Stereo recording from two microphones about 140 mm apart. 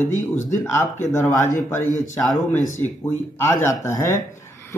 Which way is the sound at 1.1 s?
20° left (ahead or behind).